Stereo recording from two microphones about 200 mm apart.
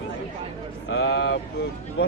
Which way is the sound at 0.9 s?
65° left (ahead or behind).